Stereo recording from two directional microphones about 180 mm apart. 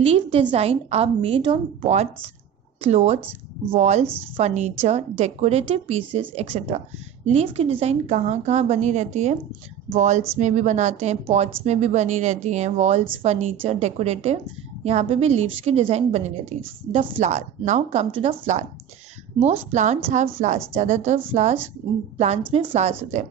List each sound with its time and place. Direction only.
0.0 s a woman's voice: 30° right (ahead or behind)
4.0 s speech: 10° right (ahead or behind)
4.4 s a woman's voice: 40° right (ahead or behind)
19.7 s a woman's voice: 40° right (ahead or behind)
22.5 s a woman's voice: 30° right (ahead or behind)